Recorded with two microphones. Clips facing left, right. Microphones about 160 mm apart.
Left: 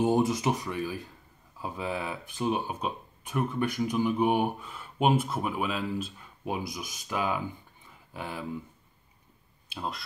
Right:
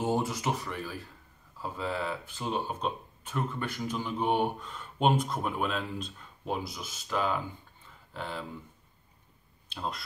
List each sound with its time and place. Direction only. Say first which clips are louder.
0.0 s speech: left 5 dB; 15° left (ahead or behind)
9.7 s speech: even; 5° left (ahead or behind)